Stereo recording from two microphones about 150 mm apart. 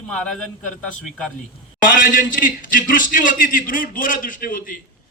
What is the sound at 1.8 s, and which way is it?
A man's voice, 65° left (ahead or behind).